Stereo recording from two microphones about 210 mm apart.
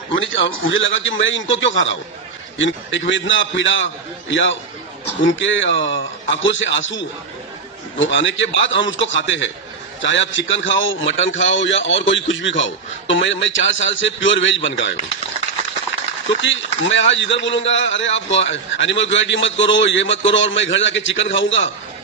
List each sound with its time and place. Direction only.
0.2 s a man's voice: 65° left (ahead or behind)
16.4 s a man's voice: 60° left (ahead or behind)